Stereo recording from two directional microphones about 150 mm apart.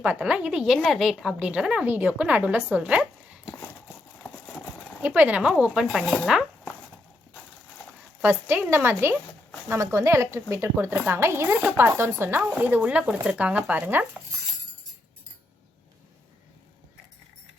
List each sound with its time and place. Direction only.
0.0 s speech: 10° right (ahead or behind)
5.0 s speech: 10° right (ahead or behind)
8.2 s speech: 15° right (ahead or behind)